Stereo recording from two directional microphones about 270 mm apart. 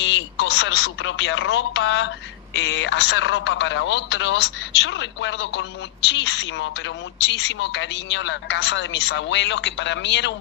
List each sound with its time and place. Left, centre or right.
0.0 s a woman's voice: left